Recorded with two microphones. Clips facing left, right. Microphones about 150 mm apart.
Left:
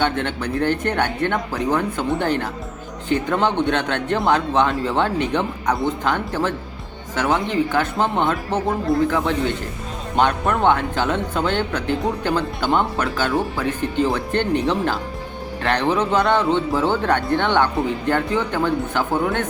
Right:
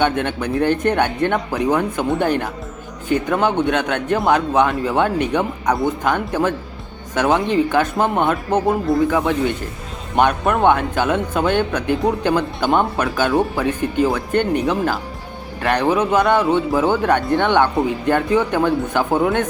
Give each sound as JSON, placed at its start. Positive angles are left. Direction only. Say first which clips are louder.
{"t": 0.0, "sound": "speech", "louder": "right 3 dB", "side_deg": -15}